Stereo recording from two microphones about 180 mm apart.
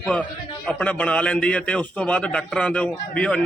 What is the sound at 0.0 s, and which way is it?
A man's voice, 5° left (ahead or behind).